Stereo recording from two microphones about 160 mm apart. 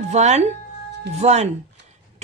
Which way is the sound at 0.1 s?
45° right (ahead or behind).